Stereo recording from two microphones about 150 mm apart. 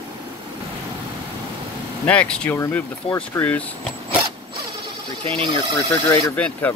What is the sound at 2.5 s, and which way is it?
Speech, 20° left (ahead or behind).